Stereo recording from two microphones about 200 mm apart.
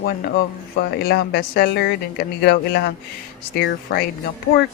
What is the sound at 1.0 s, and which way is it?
Speech, 50° left (ahead or behind).